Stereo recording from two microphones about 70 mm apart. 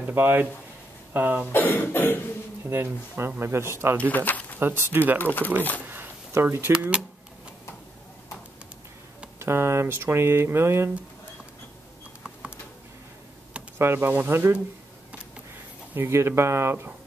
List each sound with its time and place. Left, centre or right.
0.0 s speech: right
1.5 s cough: left
2.6 s speech: right
4.1 s speech: left
4.6 s speech: right
5.2 s cough: left
6.4 s speech: right
9.4 s speech: right
12.2 s typing: centre
13.7 s speech: right
15.9 s speech: right